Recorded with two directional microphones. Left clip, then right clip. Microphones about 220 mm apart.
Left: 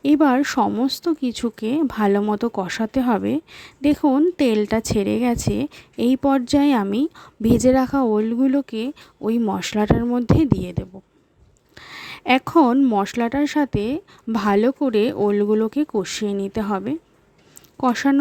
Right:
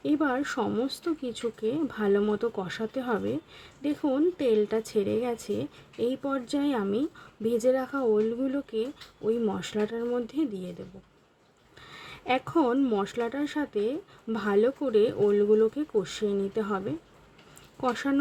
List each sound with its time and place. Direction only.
0.0 s speech: 50° left (ahead or behind)
11.8 s speech: 50° left (ahead or behind)